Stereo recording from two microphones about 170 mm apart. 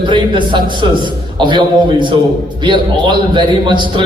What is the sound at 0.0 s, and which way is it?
A man's voice, 25° right (ahead or behind).